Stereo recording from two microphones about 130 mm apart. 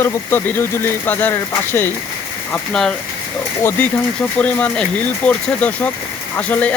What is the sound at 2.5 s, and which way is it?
Speech, 5° left (ahead or behind).